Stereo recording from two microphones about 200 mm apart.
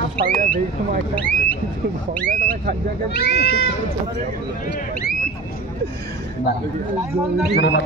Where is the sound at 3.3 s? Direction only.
55° left (ahead or behind).